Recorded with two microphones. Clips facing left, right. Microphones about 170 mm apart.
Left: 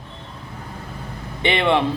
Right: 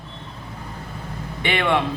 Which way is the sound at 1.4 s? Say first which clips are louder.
Left 3 dB; 25° left (ahead or behind).